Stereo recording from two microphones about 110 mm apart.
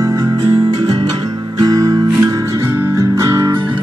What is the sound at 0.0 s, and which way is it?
Music, 30° right (ahead or behind).